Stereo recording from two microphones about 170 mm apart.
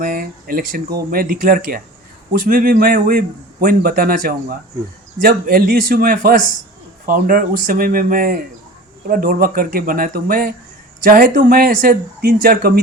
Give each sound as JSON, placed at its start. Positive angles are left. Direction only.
{"t": 0.0, "sound": "a man's voice", "side_deg": -55}